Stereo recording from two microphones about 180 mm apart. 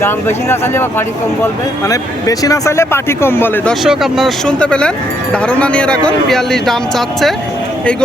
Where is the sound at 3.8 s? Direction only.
Centre (ahead or behind).